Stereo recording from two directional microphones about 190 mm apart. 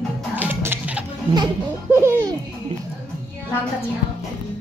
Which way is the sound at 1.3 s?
20° right (ahead or behind).